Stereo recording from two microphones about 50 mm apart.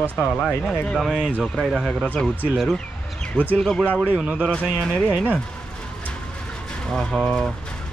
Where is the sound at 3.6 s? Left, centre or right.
Centre.